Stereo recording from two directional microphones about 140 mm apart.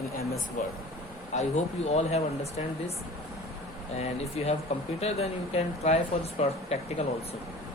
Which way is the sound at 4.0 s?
45° left (ahead or behind).